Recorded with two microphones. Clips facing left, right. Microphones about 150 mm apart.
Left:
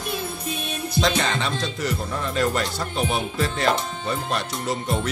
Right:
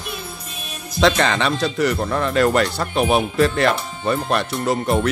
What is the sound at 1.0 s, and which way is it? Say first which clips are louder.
Speech: right 6 dB; 75° right (ahead or behind).